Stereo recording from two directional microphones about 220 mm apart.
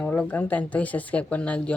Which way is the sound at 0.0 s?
5° left (ahead or behind).